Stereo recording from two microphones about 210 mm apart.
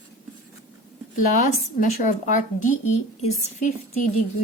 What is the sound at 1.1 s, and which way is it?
A woman's voice, 35° left (ahead or behind).